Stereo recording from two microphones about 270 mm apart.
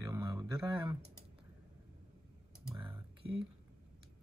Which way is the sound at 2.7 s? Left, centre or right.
Centre.